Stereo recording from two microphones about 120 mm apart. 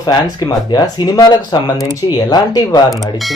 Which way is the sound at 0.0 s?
35° left (ahead or behind).